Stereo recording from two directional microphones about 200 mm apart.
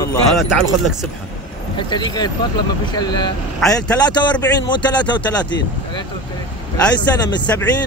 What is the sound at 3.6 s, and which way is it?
Speech, centre (ahead or behind).